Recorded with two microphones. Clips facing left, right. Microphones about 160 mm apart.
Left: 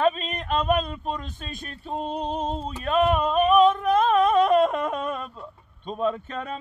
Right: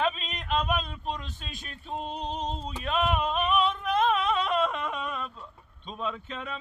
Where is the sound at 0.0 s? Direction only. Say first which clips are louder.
Left 6 dB; 45° left (ahead or behind).